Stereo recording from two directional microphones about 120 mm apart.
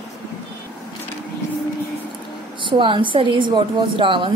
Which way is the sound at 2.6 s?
45° right (ahead or behind).